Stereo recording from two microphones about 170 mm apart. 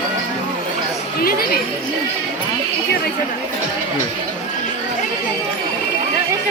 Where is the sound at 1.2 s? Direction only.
60° left (ahead or behind).